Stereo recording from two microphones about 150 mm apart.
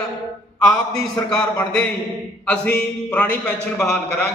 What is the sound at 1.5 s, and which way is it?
A man's voice, 10° left (ahead or behind).